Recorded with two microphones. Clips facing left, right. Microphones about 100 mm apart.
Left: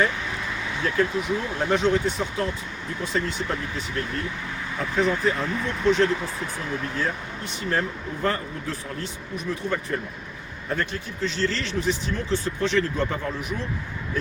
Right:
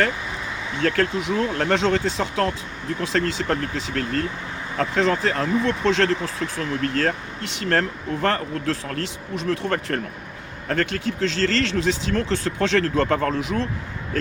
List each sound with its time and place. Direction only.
0.8 s speech: 90° right
10.7 s speech: 90° right